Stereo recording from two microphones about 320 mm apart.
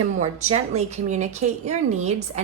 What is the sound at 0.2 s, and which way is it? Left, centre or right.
Speech, right.